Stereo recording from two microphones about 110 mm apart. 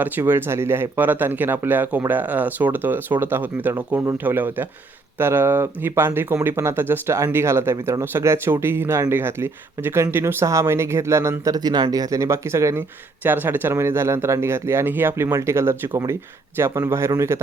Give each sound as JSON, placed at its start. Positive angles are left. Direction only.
{"t": 0.0, "sound": "speech", "side_deg": -20}